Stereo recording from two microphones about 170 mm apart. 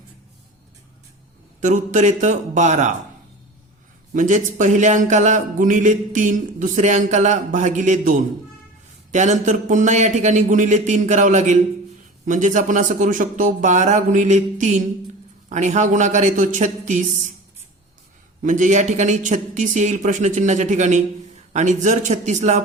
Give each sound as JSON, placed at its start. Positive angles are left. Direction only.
{"t": 1.6, "sound": "a man's voice", "side_deg": -45}
{"t": 4.1, "sound": "a man's voice", "side_deg": -50}
{"t": 9.1, "sound": "a man's voice", "side_deg": -45}
{"t": 18.4, "sound": "a man's voice", "side_deg": -45}